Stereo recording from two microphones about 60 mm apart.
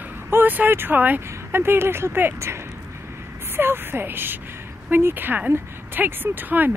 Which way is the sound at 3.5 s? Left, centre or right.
Right.